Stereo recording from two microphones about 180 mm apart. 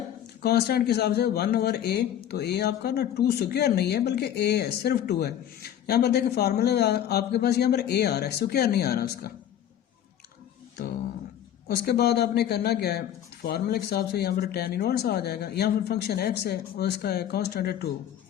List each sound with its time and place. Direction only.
0.4 s speech: 65° left (ahead or behind)
11.7 s speech: 60° left (ahead or behind)